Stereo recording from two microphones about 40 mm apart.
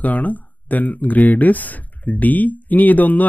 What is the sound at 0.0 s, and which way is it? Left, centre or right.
Speech, left.